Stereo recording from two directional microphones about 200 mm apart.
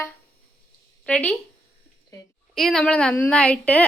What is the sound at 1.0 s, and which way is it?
Speech, 5° left (ahead or behind).